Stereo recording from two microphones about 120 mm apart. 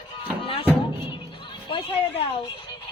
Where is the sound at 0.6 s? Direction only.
15° right (ahead or behind).